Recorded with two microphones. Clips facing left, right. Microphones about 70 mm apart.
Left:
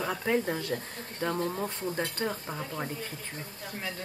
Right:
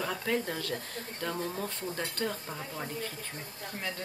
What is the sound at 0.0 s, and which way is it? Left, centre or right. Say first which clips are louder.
Speech: left 3 dB; centre.